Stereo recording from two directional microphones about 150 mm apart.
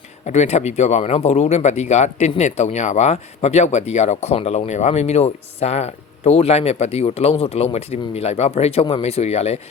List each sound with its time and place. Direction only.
0.3 s speech: 50° left (ahead or behind)